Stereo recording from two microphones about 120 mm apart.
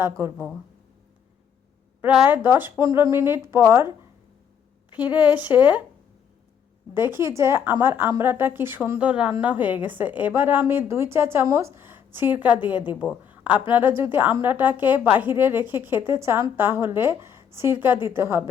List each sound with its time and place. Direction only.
0.2 s a woman's voice: 20° right (ahead or behind)
2.2 s a woman's voice: 15° right (ahead or behind)
4.9 s a woman's voice: 10° right (ahead or behind)
6.9 s a woman's voice: 20° right (ahead or behind)